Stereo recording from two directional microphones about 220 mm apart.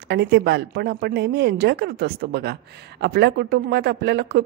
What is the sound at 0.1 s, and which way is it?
A woman's voice, 50° right (ahead or behind).